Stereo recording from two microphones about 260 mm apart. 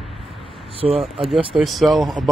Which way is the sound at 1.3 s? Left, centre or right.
Centre.